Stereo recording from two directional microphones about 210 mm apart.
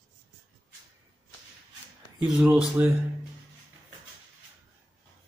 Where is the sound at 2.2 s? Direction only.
5° right (ahead or behind).